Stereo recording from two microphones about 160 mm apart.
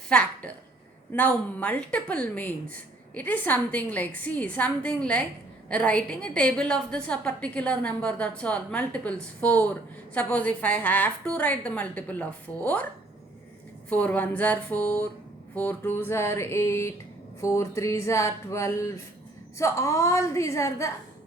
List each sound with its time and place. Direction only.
0.1 s a woman's voice: 5° left (ahead or behind)
13.9 s a woman's voice: 10° left (ahead or behind)
17.4 s a sound: 20° left (ahead or behind)